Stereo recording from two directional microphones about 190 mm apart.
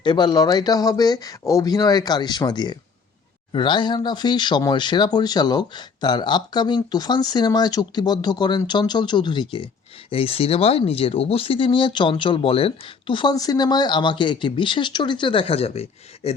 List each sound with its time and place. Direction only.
0.0 s speech: 25° left (ahead or behind)